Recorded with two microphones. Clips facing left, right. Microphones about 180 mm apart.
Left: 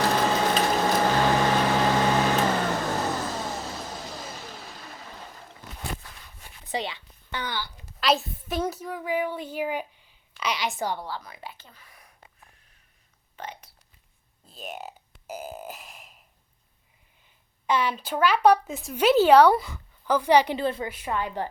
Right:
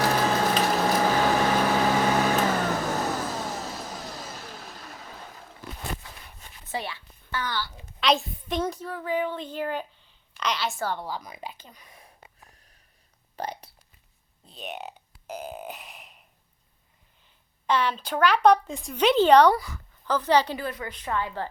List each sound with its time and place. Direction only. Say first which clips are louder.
0.0 s a sound: even; 5° right (ahead or behind)
6.7 s a sound: left 2 dB; 20° left (ahead or behind)
8.0 s a sound: even; 5° left (ahead or behind)
11.0 s speech: right 2 dB; 15° right (ahead or behind)
13.3 s speech: right 5 dB; 35° right (ahead or behind)
14.4 s speech: right 1 dB; centre (ahead or behind)
17.7 s a woman's voice: even; 10° left (ahead or behind)
19.5 s a woman's voice: left 3 dB; 20° left (ahead or behind)
20.6 s speech: left 6 dB; 25° left (ahead or behind)
20.8 s a woman's voice: left 1 dB; 15° left (ahead or behind)